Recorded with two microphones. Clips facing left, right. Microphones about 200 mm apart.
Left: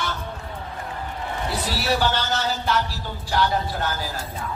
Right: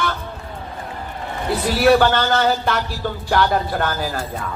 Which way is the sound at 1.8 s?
55° right (ahead or behind).